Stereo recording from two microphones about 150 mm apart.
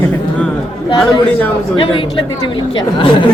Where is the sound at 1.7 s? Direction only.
35° left (ahead or behind).